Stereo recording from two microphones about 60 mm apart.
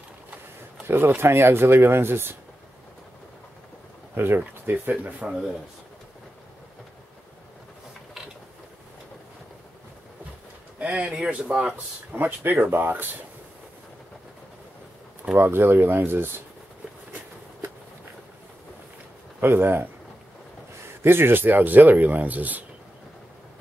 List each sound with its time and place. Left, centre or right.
0.8 s speech: right
4.1 s speech: right
5.2 s speech: centre
10.8 s speech: right
12.2 s speech: right
15.3 s speech: right
19.4 s speech: right